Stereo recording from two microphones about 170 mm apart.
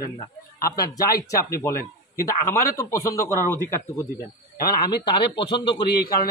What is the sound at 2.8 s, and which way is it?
Speech, 15° left (ahead or behind).